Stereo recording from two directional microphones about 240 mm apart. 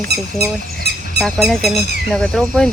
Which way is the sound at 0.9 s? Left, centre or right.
Right.